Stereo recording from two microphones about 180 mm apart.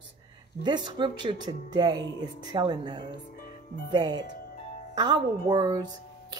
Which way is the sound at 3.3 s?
55° left (ahead or behind).